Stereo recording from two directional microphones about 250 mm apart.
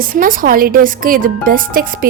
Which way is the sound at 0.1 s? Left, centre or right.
Right.